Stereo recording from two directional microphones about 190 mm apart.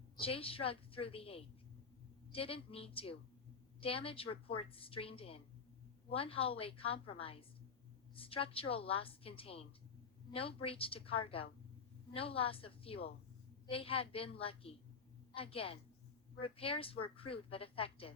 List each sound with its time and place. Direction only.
0.2 s a woman's voice: 30° left (ahead or behind)